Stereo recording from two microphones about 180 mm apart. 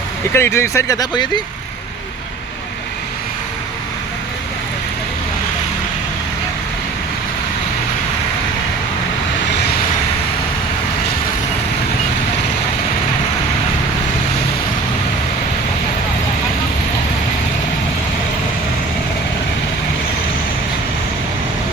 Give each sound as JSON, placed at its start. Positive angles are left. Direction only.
{"t": 0.3, "sound": "speech", "side_deg": 15}